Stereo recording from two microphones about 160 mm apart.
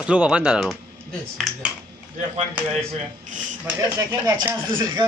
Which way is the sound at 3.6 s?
15° right (ahead or behind).